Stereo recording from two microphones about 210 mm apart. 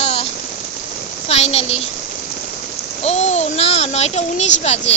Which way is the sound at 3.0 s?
30° left (ahead or behind).